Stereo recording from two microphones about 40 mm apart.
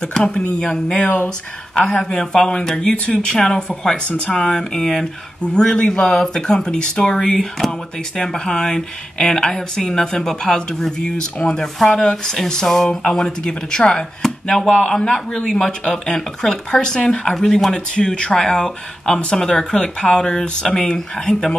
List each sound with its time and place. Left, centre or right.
0.2 s speech: left
1.0 s speech: left
1.9 s speech: left
4.7 s speech: centre
7.2 s speech: centre
12.3 s speech: centre